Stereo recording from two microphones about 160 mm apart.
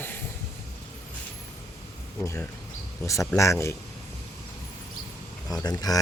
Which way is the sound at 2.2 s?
15° left (ahead or behind).